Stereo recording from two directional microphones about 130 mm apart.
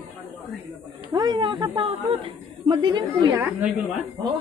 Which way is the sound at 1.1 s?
35° right (ahead or behind).